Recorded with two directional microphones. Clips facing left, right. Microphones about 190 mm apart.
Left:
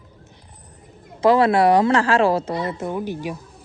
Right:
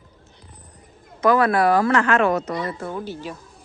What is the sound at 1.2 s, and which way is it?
A woman's voice, 25° left (ahead or behind).